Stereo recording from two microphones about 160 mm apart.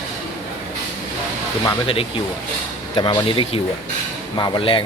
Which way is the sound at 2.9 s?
30° left (ahead or behind).